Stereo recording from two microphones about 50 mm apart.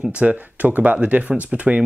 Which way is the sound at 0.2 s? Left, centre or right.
Right.